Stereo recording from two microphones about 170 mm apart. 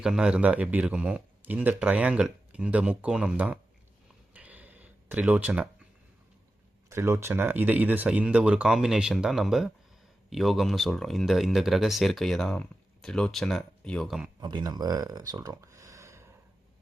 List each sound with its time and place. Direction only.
0.0 s a man's voice: 5° right (ahead or behind)
4.4 s a sound: 10° right (ahead or behind)
6.9 s a man's voice: 15° right (ahead or behind)
14.4 s speech: 25° right (ahead or behind)